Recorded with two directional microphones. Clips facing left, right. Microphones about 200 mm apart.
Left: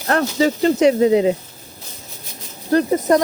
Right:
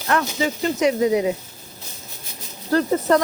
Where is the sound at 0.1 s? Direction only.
40° left (ahead or behind).